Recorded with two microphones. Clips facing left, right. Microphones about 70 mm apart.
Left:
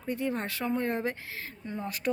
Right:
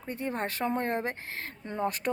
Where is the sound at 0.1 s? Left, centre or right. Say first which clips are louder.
Left 1 dB; right.